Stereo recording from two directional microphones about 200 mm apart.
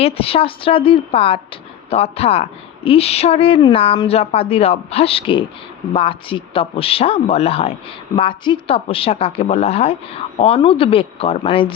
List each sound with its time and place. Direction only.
0.0 s speech: 30° left (ahead or behind)